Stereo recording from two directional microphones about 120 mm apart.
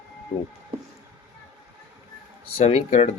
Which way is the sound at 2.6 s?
55° left (ahead or behind).